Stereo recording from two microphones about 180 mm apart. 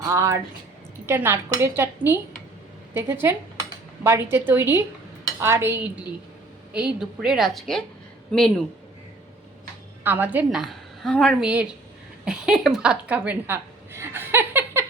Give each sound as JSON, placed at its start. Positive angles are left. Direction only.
{"t": 0.0, "sound": "a woman's voice", "side_deg": -15}
{"t": 10.0, "sound": "a woman's voice", "side_deg": -10}